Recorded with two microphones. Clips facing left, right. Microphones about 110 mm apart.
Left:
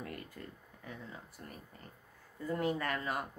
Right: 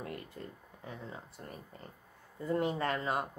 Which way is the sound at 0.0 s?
25° right (ahead or behind).